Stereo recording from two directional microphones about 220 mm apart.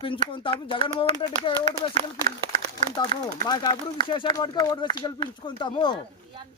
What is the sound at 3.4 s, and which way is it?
Speech, 20° left (ahead or behind).